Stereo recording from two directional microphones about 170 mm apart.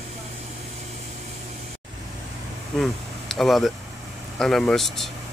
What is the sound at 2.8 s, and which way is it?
Speech, centre (ahead or behind).